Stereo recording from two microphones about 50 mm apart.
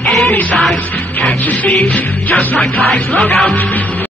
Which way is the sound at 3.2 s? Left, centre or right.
Centre.